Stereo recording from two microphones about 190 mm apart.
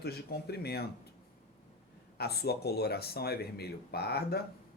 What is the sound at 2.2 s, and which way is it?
Speech, 55° left (ahead or behind).